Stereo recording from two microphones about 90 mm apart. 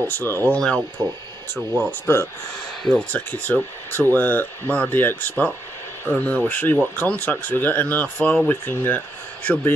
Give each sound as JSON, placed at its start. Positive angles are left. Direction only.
{"t": 0.0, "sound": "speech", "side_deg": 25}
{"t": 0.6, "sound": "speech", "side_deg": 10}
{"t": 1.9, "sound": "speech", "side_deg": 30}